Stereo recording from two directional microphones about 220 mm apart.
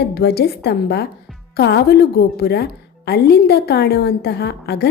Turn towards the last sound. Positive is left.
turn(degrees=50)  # may be behind; listen again after turning